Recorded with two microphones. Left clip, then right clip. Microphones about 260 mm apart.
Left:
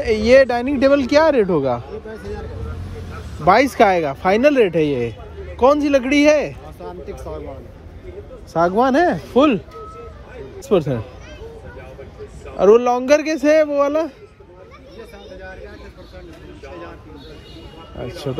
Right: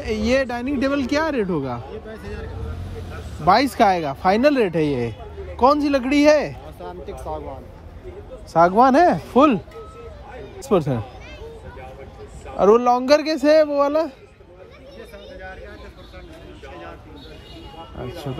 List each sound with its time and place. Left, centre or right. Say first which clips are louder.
0.0 s speech: left 9 dB; centre
3.4 s speech: left 3 dB; centre
6.8 s a sound: left 1 dB; left
8.5 s speech: right 2 dB; right
10.6 s speech: left 2 dB; right
12.5 s speech: left 2 dB; right